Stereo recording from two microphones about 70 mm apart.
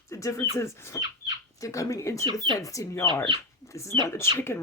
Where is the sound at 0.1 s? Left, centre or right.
Left.